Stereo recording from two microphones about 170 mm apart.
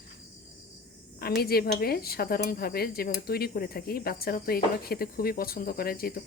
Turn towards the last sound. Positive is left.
turn(degrees=60)  # may be behind; listen again after turning